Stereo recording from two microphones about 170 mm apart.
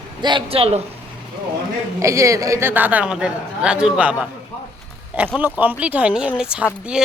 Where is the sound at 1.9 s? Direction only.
20° right (ahead or behind).